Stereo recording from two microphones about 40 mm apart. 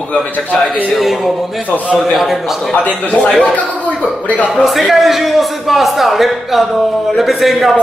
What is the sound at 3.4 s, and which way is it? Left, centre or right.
Speech, left.